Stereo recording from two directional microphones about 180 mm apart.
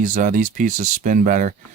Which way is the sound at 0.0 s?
45° right (ahead or behind).